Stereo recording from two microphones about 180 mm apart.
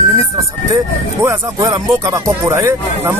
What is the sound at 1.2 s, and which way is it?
Speech, 15° right (ahead or behind).